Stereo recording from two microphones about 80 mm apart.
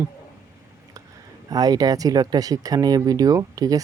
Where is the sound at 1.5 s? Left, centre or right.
Right.